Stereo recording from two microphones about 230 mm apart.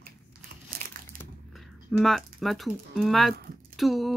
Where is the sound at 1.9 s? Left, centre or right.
Centre.